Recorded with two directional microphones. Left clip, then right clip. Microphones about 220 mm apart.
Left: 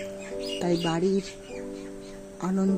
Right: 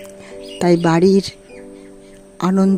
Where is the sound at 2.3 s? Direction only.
45° right (ahead or behind).